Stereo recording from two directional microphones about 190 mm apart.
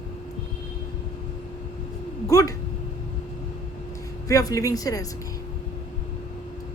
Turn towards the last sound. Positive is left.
turn(degrees=20)  # may be behind; listen again after turning